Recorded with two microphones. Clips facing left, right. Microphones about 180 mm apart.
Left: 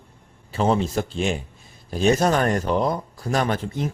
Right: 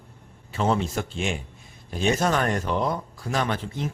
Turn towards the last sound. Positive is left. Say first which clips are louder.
# left 4 dB
turn(degrees=45)  # may be behind; listen again after turning